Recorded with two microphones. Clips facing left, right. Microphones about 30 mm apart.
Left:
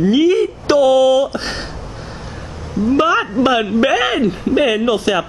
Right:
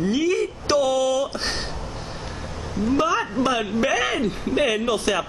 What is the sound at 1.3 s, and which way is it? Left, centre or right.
Speech, centre.